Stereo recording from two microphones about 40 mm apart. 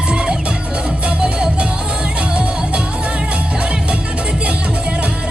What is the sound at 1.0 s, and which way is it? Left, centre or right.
Music, right.